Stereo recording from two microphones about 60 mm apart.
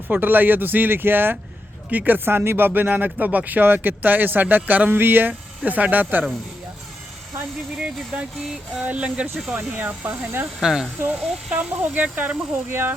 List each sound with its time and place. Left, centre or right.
0.1 s speech: right
7.8 s speech: centre; by 10.5 s right
10.6 s speech: centre
11.0 s speech: right